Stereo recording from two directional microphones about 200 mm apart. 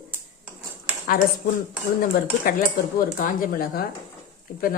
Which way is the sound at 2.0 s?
45° left (ahead or behind).